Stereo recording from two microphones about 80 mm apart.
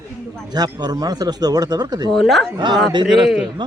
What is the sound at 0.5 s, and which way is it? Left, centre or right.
Speech, right.